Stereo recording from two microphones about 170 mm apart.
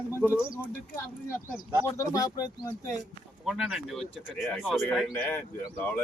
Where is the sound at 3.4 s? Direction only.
5° right (ahead or behind).